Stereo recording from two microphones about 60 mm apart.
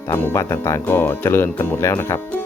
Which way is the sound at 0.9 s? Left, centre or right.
Left.